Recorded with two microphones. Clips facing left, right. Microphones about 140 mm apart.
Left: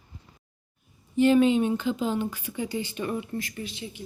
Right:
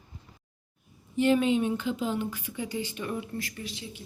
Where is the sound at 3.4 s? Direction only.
20° left (ahead or behind).